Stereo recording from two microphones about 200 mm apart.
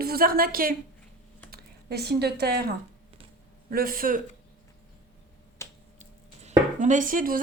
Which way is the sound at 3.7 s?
45° right (ahead or behind).